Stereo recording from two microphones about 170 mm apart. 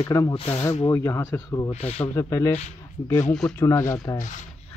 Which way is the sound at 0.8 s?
15° left (ahead or behind).